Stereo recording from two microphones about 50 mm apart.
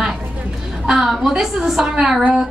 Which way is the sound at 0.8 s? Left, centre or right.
Centre.